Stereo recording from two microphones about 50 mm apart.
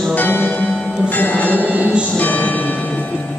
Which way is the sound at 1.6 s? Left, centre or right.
Right.